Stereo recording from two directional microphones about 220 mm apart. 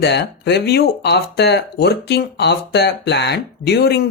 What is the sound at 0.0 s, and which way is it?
Speech, 50° left (ahead or behind).